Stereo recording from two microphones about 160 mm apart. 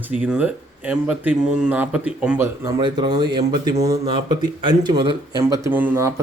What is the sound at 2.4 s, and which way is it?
Speech, 20° right (ahead or behind).